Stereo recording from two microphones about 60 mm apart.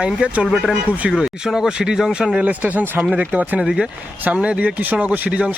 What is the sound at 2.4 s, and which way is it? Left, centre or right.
Speech, right.